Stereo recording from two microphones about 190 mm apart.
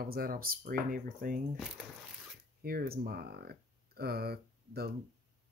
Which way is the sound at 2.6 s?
50° right (ahead or behind).